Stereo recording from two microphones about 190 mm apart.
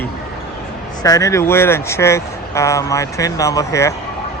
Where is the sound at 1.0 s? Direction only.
20° left (ahead or behind).